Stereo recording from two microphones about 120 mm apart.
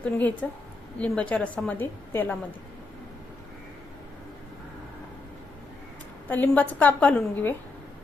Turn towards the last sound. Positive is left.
turn(degrees=10)  # may be behind; listen again after turning